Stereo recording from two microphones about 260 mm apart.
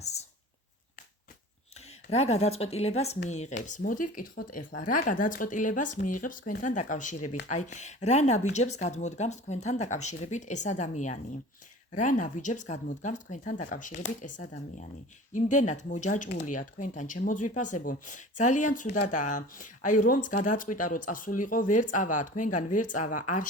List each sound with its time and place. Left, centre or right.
2.0 s speech: left
15.4 s speech: left